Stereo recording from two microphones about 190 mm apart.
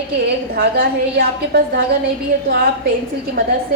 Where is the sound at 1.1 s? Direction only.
55° right (ahead or behind).